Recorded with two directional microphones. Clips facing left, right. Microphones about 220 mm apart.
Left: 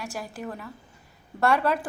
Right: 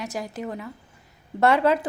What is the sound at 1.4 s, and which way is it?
Speech, 20° right (ahead or behind).